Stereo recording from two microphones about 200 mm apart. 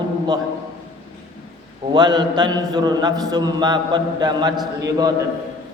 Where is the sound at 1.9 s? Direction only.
20° right (ahead or behind).